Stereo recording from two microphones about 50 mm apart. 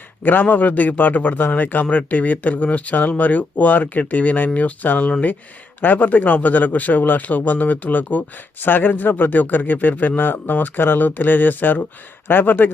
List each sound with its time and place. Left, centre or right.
0.2 s a man's voice: left